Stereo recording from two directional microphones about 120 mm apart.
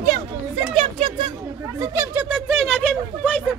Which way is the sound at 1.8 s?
20° right (ahead or behind).